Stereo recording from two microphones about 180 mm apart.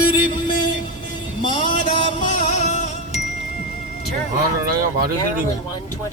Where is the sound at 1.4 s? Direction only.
30° left (ahead or behind).